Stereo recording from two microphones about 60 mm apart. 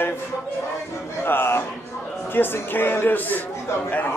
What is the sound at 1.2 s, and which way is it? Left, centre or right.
A man's voice, left.